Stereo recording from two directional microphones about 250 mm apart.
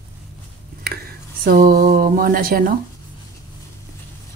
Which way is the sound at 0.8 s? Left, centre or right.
Right.